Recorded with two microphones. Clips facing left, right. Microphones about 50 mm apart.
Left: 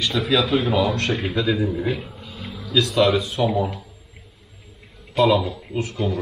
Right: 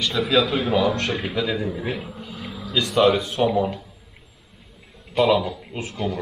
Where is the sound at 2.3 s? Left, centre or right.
Centre.